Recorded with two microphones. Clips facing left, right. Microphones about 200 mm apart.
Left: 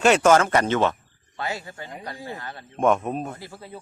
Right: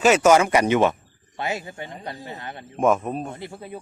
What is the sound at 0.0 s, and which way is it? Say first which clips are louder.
Speech: right 1 dB; 5° right (ahead or behind).